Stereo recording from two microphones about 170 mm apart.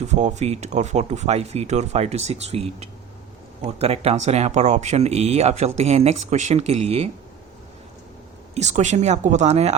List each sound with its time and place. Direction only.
0.0 s speech: 45° right (ahead or behind)
8.5 s speech: 45° right (ahead or behind)